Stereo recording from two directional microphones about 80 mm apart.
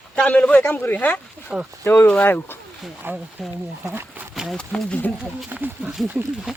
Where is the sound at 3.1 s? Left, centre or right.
Right.